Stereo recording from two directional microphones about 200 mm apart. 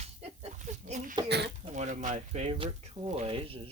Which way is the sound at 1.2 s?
55° right (ahead or behind).